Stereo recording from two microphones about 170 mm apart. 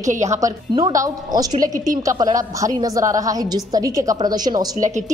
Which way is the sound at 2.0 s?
20° right (ahead or behind).